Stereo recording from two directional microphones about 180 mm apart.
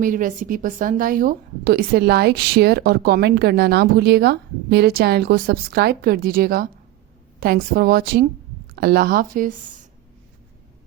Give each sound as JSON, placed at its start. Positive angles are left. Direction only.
{"t": 0.0, "sound": "a woman's voice", "side_deg": -50}